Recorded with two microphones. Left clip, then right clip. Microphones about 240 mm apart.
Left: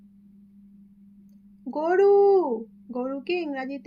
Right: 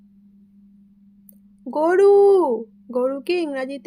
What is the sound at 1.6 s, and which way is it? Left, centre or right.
Speech, right.